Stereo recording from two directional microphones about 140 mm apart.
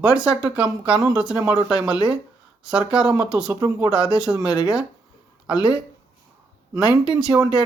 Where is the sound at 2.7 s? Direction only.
5° right (ahead or behind).